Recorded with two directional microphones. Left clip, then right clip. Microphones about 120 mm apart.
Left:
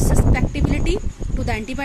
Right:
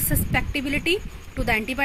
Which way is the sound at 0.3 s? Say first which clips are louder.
Even; 10° left (ahead or behind).